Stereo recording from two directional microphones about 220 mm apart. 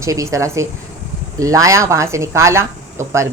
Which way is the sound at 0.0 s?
15° right (ahead or behind).